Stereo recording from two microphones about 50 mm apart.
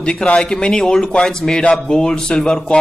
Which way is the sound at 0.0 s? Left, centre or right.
Centre.